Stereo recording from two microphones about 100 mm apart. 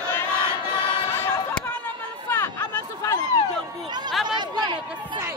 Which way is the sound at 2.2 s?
25° left (ahead or behind).